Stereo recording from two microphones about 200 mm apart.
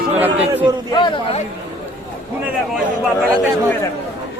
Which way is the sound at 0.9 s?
20° left (ahead or behind).